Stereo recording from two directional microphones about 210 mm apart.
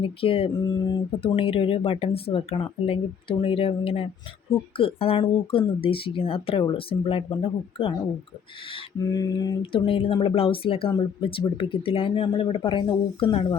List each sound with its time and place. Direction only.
0.0 s speech: 25° left (ahead or behind)
9.0 s speech: 20° left (ahead or behind)